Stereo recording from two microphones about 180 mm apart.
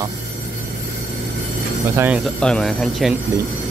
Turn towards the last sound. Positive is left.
turn(degrees=0)  # may be behind; listen again after turning